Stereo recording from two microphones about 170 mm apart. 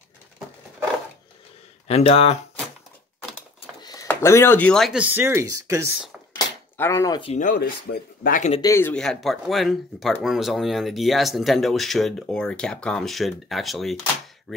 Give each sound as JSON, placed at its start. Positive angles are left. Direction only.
{"t": 1.9, "sound": "speech", "side_deg": 35}
{"t": 3.8, "sound": "a sound", "side_deg": 20}
{"t": 4.1, "sound": "speech", "side_deg": 15}
{"t": 6.3, "sound": "chopping", "side_deg": 20}
{"t": 7.3, "sound": "speech", "side_deg": 50}
{"t": 8.5, "sound": "speech", "side_deg": 15}